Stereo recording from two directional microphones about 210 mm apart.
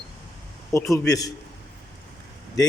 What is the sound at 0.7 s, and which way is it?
Speech, 15° left (ahead or behind).